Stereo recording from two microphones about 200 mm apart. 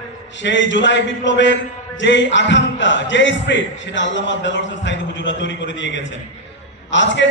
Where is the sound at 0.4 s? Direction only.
65° left (ahead or behind).